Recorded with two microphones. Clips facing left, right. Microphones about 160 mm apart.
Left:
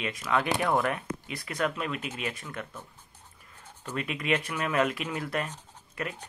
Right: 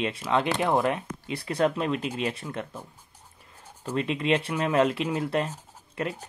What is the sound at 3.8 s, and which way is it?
Speech, 30° right (ahead or behind).